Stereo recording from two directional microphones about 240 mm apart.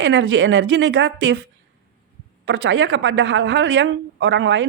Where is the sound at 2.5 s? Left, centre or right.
Right.